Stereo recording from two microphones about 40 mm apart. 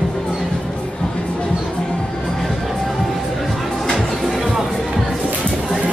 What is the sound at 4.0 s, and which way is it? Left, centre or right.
Music, centre.